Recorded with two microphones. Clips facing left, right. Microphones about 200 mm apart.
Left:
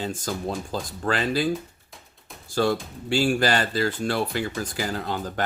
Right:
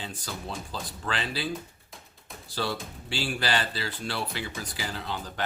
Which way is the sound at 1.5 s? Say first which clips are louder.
Left 7 dB; centre (ahead or behind).